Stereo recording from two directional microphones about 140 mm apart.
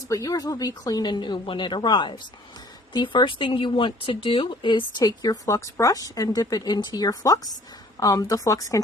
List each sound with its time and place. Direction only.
0.1 s speech: 25° left (ahead or behind)